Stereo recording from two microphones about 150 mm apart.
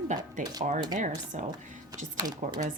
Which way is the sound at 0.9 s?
55° right (ahead or behind).